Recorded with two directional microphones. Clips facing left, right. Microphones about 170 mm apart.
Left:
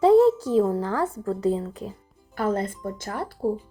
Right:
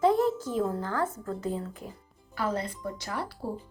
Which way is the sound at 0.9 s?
35° left (ahead or behind).